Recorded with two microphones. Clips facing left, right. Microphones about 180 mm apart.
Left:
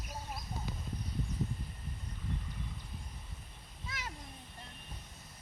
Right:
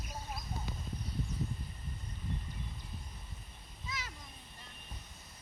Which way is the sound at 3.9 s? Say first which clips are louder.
Even; 55° left (ahead or behind).